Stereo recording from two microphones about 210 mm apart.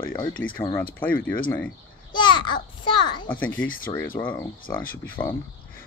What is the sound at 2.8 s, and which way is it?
Speech, 20° left (ahead or behind).